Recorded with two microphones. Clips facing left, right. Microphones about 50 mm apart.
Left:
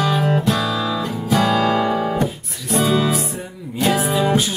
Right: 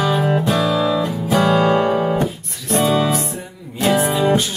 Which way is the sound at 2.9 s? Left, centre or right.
Centre.